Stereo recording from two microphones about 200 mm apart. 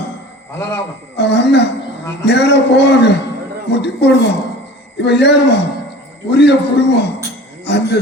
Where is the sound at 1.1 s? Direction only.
60° left (ahead or behind).